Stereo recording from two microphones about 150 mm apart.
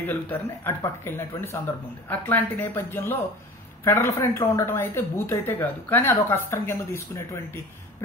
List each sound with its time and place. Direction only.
0.0 s a woman's voice: 15° left (ahead or behind)